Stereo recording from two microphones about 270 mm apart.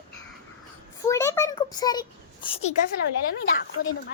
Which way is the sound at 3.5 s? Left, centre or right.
Left.